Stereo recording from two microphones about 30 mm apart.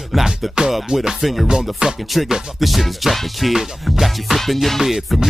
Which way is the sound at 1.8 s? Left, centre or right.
Right.